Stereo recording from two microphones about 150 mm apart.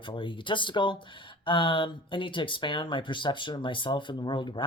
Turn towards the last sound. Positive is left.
turn(degrees=30)  # may be behind; listen again after turning